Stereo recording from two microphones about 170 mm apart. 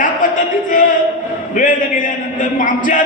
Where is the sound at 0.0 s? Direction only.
50° left (ahead or behind).